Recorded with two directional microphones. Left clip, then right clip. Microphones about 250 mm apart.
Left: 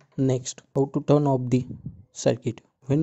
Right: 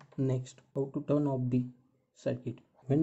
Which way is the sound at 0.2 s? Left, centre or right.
Left.